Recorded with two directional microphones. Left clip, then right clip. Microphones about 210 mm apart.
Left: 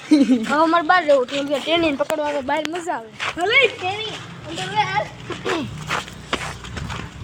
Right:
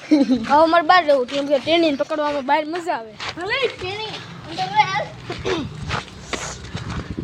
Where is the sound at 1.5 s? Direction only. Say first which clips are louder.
Right 2 dB; 25° right (ahead or behind).